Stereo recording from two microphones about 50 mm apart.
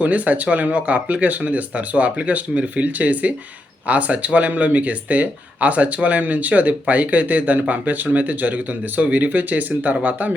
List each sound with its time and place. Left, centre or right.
0.0 s speech: right